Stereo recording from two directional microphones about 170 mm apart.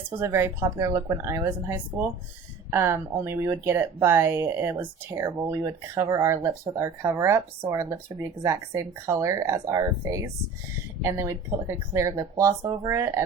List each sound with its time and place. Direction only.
0.2 s speech: 15° right (ahead or behind)